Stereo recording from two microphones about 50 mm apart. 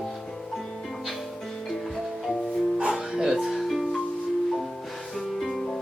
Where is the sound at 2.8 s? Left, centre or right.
Centre.